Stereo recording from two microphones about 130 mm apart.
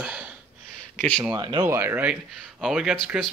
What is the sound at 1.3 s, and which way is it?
Speech, 35° right (ahead or behind).